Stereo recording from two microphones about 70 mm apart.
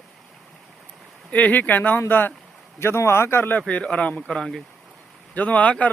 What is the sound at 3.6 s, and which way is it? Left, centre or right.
Speech, centre.